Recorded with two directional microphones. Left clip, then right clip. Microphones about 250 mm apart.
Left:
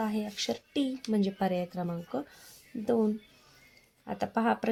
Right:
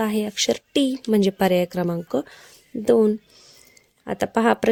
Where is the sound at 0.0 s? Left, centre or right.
Right.